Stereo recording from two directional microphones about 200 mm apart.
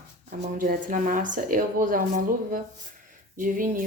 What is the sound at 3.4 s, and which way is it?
Speech, 45° right (ahead or behind).